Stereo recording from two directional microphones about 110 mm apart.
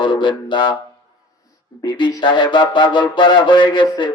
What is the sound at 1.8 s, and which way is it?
Speech, 45° left (ahead or behind).